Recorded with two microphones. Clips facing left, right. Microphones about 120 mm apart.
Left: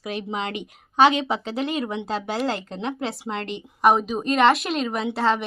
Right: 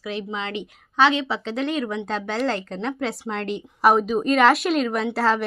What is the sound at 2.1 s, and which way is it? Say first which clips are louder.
A woman's voice: even; 10° left (ahead or behind).